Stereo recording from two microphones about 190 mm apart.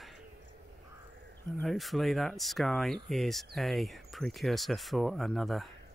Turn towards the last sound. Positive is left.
turn(degrees=0)  # may be behind; listen again after turning